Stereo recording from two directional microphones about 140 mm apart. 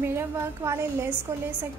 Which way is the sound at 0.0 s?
15° right (ahead or behind).